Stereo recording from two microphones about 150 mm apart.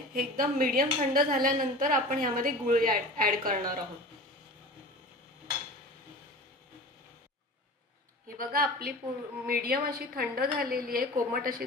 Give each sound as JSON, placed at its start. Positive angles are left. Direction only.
{"t": 0.1, "sound": "a woman's voice", "side_deg": -70}
{"t": 8.4, "sound": "a woman's voice", "side_deg": -80}